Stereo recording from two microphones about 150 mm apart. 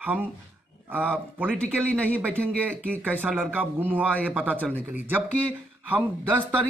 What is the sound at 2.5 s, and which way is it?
Speech, 10° right (ahead or behind).